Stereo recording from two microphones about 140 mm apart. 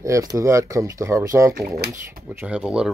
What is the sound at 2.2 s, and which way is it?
Speech, 10° right (ahead or behind).